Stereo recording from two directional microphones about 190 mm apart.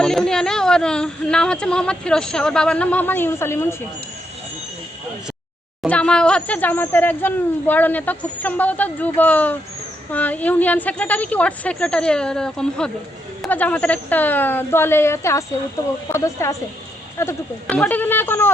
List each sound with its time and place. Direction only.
0.0 s speech: centre (ahead or behind)
5.9 s speech: 5° left (ahead or behind)